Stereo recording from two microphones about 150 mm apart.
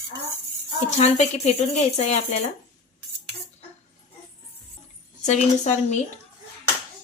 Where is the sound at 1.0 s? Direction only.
45° left (ahead or behind).